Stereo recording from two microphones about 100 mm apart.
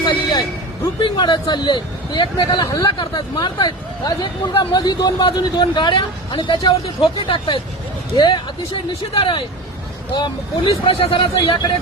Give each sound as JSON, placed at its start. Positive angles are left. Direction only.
{"t": 0.1, "sound": "a sound", "side_deg": 45}
{"t": 0.9, "sound": "speech", "side_deg": 50}
{"t": 9.1, "sound": "speech", "side_deg": 60}
{"t": 10.7, "sound": "speech", "side_deg": 70}